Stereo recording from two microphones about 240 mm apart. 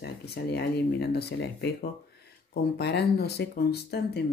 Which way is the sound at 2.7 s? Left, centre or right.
Left.